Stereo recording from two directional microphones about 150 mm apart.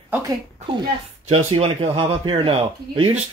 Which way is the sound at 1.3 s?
40° right (ahead or behind).